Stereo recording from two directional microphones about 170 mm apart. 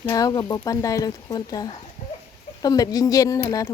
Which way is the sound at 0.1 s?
20° left (ahead or behind).